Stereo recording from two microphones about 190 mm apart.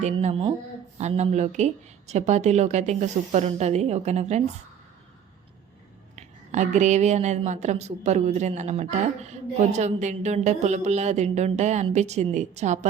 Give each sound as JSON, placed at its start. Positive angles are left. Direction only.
{"t": 0.0, "sound": "a woman's voice", "side_deg": -35}
{"t": 6.1, "sound": "a woman's voice", "side_deg": -40}